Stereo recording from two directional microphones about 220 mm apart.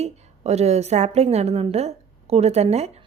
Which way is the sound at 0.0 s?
30° right (ahead or behind).